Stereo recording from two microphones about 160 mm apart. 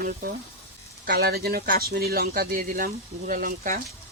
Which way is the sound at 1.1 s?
75° right (ahead or behind).